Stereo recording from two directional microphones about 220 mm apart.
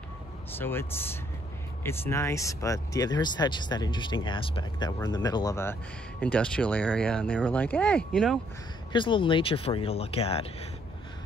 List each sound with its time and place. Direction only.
0.6 s speech: 10° left (ahead or behind)
8.9 s speech: 20° left (ahead or behind)